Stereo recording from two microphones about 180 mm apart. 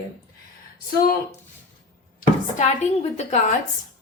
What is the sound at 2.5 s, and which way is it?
Speech, 40° left (ahead or behind).